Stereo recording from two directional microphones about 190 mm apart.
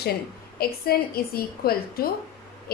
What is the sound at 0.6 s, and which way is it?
A woman's voice, 55° left (ahead or behind).